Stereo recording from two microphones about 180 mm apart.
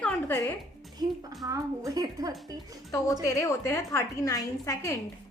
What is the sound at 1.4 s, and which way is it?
A woman's voice, 20° right (ahead or behind).